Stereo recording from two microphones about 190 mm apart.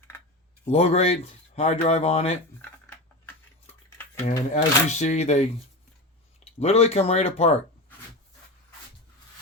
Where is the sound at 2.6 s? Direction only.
10° left (ahead or behind).